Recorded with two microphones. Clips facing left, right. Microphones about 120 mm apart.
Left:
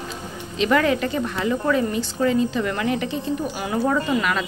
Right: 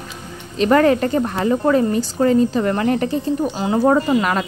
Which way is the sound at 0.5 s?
45° right (ahead or behind).